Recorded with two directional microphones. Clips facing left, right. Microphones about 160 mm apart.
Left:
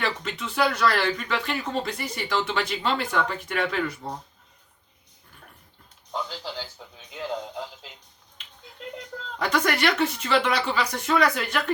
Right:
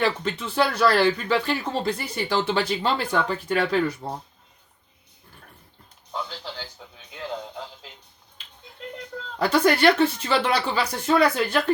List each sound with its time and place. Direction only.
0.0 s speech: 30° right (ahead or behind)
7.1 s radio: centre (ahead or behind)
9.4 s speech: 30° right (ahead or behind)